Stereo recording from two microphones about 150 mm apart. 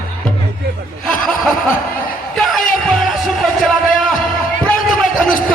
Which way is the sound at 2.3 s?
Centre (ahead or behind).